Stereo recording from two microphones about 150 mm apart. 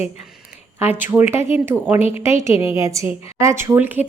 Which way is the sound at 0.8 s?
15° right (ahead or behind).